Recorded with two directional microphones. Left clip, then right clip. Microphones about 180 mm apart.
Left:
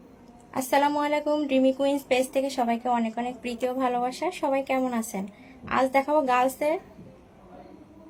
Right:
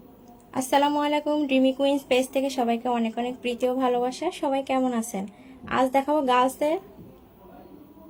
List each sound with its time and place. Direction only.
0.7 s a woman's voice: 15° right (ahead or behind)